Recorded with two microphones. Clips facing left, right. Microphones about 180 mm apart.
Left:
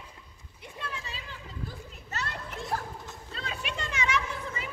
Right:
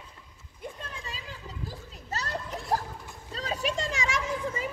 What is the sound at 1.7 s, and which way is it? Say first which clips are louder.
Children playing: right 3 dB; 35° right (ahead or behind).